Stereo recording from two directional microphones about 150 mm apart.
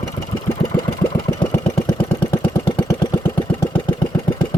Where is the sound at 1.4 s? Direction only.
30° left (ahead or behind).